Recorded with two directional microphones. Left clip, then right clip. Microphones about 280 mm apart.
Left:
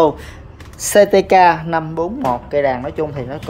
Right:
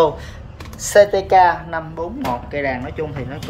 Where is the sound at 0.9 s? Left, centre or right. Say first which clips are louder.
Left 1 dB; left.